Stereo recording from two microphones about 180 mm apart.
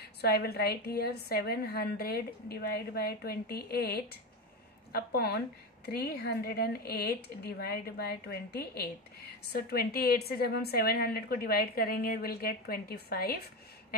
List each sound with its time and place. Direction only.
0.0 s a woman's voice: 60° left (ahead or behind)